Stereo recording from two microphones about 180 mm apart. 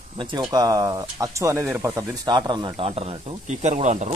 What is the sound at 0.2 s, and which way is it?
Speech, 25° right (ahead or behind).